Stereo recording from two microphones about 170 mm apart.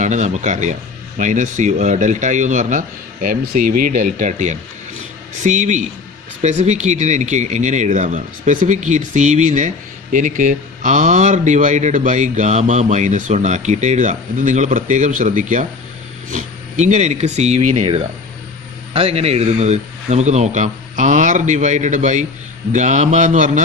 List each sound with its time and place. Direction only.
0.0 s a man's voice: 45° right (ahead or behind)